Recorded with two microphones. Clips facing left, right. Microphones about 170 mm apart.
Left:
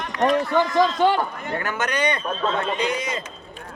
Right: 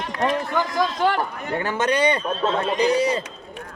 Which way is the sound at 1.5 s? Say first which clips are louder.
Right 5 dB; 30° right (ahead or behind).